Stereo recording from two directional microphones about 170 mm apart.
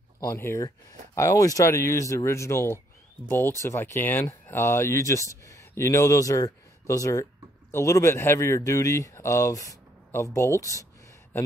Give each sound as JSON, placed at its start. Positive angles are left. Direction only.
{"t": 0.2, "sound": "speech", "side_deg": 15}